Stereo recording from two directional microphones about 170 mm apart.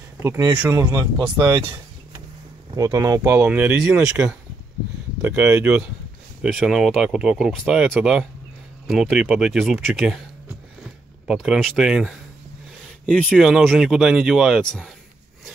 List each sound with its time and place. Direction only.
0.2 s speech: 15° right (ahead or behind)
2.7 s speech: 20° right (ahead or behind); by 10.2 s centre (ahead or behind)
11.2 s speech: centre (ahead or behind)